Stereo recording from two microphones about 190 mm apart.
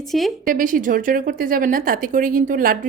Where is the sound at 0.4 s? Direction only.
45° right (ahead or behind).